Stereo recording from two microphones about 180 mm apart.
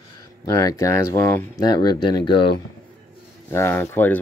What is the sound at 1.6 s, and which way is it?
Speech, 25° left (ahead or behind).